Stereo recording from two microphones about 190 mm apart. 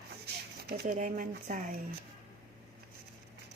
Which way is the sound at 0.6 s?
60° right (ahead or behind).